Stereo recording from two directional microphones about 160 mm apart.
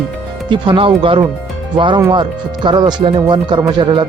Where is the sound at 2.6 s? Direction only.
30° right (ahead or behind).